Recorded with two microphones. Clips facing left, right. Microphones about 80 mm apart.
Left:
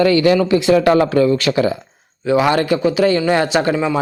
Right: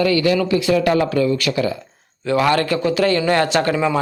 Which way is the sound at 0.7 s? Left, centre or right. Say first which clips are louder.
Left 5 dB; left.